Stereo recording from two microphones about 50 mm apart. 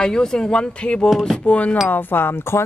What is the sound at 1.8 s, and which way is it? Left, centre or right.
Speech, left.